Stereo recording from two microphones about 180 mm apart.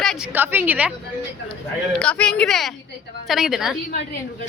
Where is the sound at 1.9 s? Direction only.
5° left (ahead or behind).